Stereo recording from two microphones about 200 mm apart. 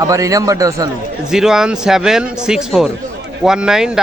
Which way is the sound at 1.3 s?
5° right (ahead or behind).